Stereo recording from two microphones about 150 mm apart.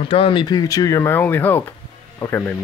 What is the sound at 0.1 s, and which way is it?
Speech, 35° left (ahead or behind).